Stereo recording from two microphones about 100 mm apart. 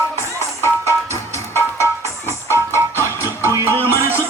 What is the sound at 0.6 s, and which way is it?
Music, 25° left (ahead or behind).